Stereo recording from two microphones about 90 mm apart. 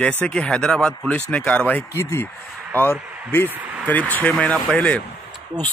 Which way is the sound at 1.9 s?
30° left (ahead or behind).